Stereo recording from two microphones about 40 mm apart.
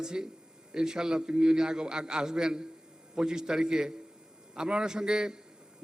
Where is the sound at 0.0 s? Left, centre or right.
Centre.